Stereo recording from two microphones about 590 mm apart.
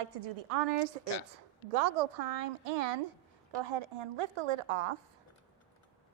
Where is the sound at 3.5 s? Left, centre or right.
Right.